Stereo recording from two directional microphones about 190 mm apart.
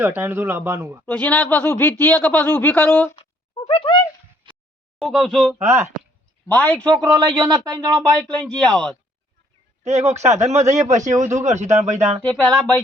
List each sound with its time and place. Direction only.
0.0 s speech: 10° right (ahead or behind)
1.0 s speech: 10° left (ahead or behind)
3.7 s a sound: 25° left (ahead or behind)
4.9 s speech: centre (ahead or behind)
5.6 s speech: 15° right (ahead or behind)
6.5 s speech: 5° left (ahead or behind)
7.0 s speech: 20° right (ahead or behind)
8.2 s speech: 5° left (ahead or behind)
10.5 s speech: 35° right (ahead or behind)
12.2 s speech: 5° left (ahead or behind)